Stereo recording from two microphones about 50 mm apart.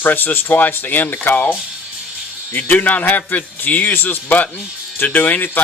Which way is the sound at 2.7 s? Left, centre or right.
Left.